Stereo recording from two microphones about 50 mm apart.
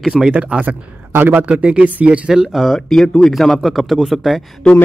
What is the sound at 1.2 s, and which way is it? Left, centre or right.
Speech, right.